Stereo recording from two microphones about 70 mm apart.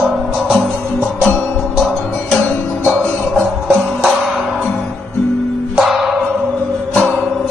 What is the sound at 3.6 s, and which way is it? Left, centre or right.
Music, centre.